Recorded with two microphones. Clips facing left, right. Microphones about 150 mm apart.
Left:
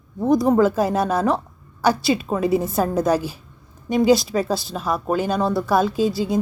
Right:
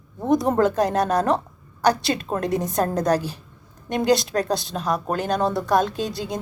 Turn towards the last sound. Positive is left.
turn(degrees=5)  # may be behind; listen again after turning